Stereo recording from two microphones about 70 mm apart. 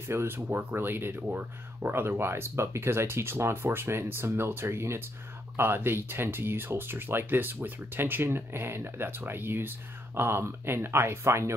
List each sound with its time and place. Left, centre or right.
0.1 s speech: right